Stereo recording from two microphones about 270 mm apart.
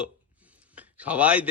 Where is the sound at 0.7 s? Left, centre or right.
Centre.